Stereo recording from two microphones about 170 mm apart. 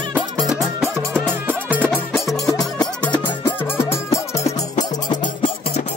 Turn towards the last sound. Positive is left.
turn(degrees=15)  # may be behind; listen again after turning